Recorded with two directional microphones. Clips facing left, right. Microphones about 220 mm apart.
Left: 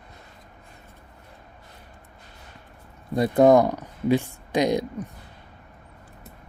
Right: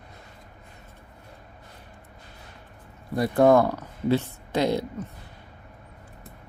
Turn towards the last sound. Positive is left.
turn(degrees=15)  # may be behind; listen again after turning